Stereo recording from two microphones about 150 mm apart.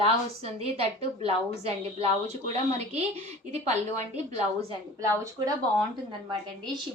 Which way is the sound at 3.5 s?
50° right (ahead or behind).